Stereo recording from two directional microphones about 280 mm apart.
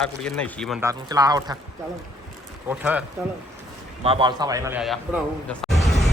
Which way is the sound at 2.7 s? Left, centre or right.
Centre.